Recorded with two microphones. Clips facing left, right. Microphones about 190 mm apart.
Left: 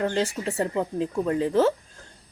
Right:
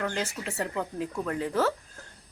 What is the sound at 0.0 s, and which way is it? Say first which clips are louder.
Speech: left 6 dB; 30° left (ahead or behind).